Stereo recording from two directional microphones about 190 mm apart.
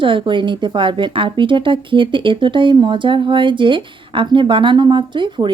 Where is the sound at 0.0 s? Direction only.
25° right (ahead or behind).